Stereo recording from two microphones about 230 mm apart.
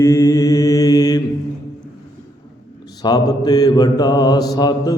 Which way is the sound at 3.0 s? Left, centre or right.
Centre.